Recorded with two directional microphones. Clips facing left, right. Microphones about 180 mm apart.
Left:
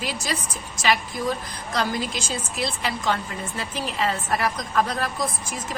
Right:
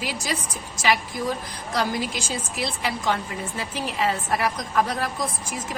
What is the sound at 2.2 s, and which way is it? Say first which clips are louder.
A woman's voice: left 1 dB; 15° right (ahead or behind).